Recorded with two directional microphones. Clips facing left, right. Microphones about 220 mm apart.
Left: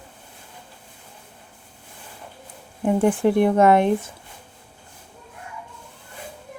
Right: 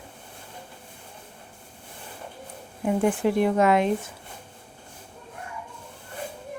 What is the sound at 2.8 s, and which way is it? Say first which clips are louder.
Speech: left 4 dB; 55° left (ahead or behind).